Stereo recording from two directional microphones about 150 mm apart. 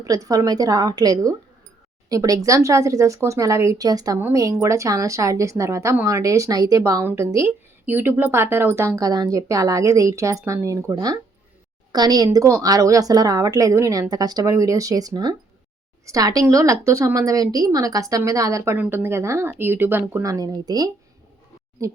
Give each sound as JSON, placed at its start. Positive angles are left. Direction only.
{"t": 0.0, "sound": "a woman's voice", "side_deg": -25}